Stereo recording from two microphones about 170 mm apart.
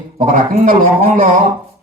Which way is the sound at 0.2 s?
50° right (ahead or behind).